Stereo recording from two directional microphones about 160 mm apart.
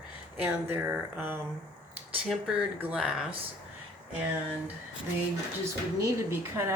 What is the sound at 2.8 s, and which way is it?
Speech, 5° right (ahead or behind).